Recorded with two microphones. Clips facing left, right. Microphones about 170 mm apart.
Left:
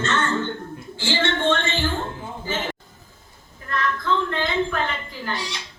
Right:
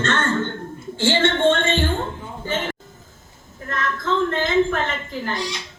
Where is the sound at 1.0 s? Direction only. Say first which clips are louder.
Right 5 dB; 50° right (ahead or behind).